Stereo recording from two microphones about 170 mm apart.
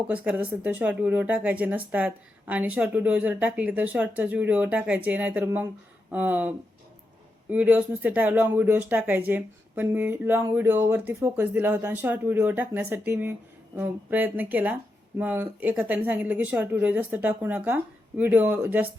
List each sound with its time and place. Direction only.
0.1 s speech: 10° right (ahead or behind)
7.5 s speech: 10° right (ahead or behind)